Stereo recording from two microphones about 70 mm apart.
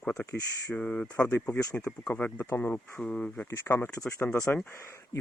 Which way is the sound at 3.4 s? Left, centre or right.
Left.